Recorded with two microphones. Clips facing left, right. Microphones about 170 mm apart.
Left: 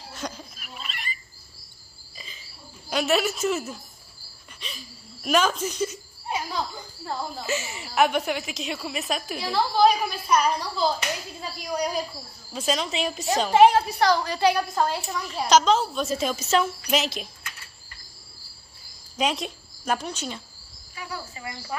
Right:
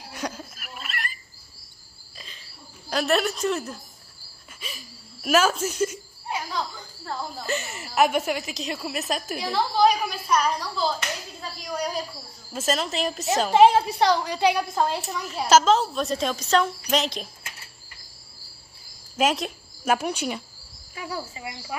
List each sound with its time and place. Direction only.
0.2 s a sound: 5° right (ahead or behind)
2.1 s cricket: centre (ahead or behind)
4.6 s speech: 5° right (ahead or behind)
7.1 s a woman's voice: 5° left (ahead or behind)
12.5 s a woman's voice: centre (ahead or behind)
13.7 s a woman's voice: 25° right (ahead or behind)
15.0 s a woman's voice: centre (ahead or behind)
19.1 s a woman's voice: centre (ahead or behind)
21.4 s speech: 15° right (ahead or behind)